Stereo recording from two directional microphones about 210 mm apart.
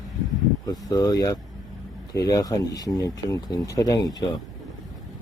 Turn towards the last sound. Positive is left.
turn(degrees=20)  # may be behind; listen again after turning